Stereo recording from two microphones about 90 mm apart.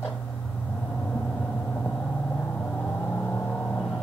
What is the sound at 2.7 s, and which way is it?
Vehicle, 15° left (ahead or behind).